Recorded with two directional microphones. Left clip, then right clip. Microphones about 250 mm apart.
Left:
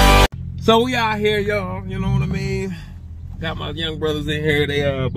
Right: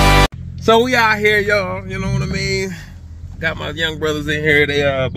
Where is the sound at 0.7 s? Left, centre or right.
Centre.